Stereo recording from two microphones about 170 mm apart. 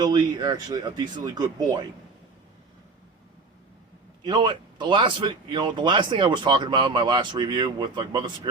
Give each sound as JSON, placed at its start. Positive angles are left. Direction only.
{"t": 0.0, "sound": "speech", "side_deg": -25}
{"t": 4.2, "sound": "speech", "side_deg": -25}